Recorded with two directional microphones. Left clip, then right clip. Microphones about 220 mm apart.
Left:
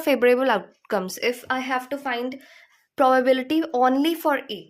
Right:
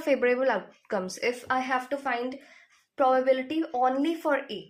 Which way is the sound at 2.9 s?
55° left (ahead or behind).